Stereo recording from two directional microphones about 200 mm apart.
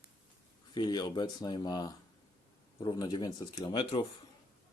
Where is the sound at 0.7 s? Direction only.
20° left (ahead or behind).